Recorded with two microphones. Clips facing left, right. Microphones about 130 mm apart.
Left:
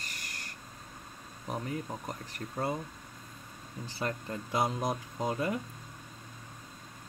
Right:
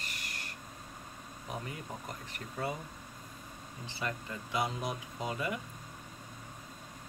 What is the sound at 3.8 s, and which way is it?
Speech, 40° left (ahead or behind).